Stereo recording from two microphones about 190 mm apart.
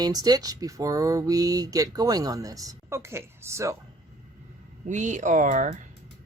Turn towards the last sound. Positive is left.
turn(degrees=-40)  # may be behind; listen again after turning